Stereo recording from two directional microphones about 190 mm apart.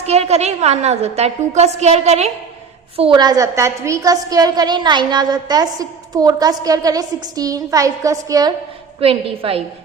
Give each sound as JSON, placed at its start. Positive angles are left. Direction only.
{"t": 0.0, "sound": "a woman's voice", "side_deg": -35}
{"t": 3.0, "sound": "a woman's voice", "side_deg": -25}
{"t": 9.0, "sound": "a woman's voice", "side_deg": -30}